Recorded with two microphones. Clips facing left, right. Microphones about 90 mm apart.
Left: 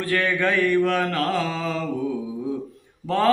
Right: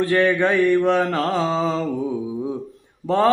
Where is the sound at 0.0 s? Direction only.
25° right (ahead or behind).